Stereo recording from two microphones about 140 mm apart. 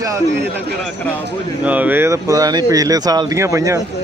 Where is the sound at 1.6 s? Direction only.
10° right (ahead or behind).